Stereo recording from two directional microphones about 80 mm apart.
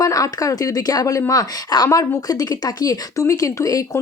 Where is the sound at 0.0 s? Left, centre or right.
Left.